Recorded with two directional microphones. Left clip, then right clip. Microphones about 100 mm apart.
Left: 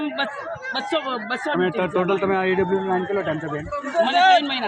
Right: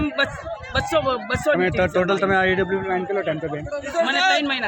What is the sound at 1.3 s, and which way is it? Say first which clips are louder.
Speech: right 3 dB; 80° right.